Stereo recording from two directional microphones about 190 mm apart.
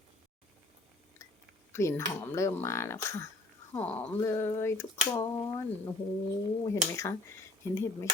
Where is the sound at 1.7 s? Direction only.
15° left (ahead or behind).